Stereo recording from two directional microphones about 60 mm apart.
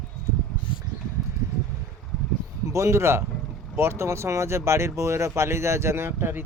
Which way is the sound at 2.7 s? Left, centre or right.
Right.